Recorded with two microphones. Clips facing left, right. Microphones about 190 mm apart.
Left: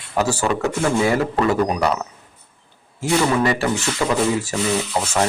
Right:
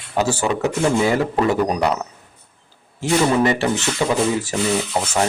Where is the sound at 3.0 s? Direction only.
20° right (ahead or behind).